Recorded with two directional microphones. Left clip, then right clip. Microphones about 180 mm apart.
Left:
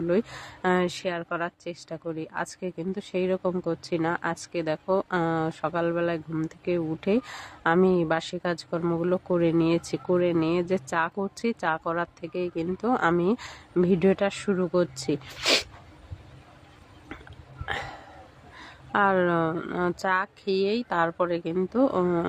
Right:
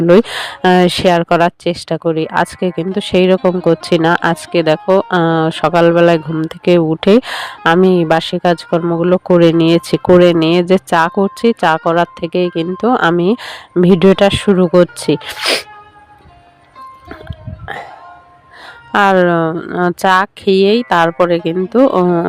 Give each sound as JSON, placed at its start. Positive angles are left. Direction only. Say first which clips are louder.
{"t": 0.1, "sound": "speech", "louder": "right 19 dB", "side_deg": -50}
{"t": 15.4, "sound": "speech", "louder": "right 4 dB", "side_deg": -35}
{"t": 18.9, "sound": "speech", "louder": "right 13 dB", "side_deg": -50}
{"t": 22.0, "sound": "speech", "louder": "right 13 dB", "side_deg": -35}